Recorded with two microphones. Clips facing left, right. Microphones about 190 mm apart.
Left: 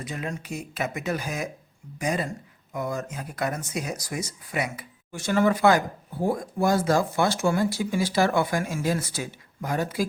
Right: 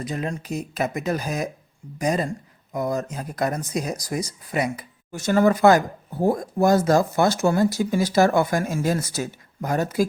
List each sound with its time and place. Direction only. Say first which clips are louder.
0.0 s speech: right 5 dB; 40° right (ahead or behind)